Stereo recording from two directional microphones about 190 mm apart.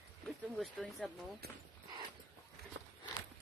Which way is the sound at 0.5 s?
Centre (ahead or behind).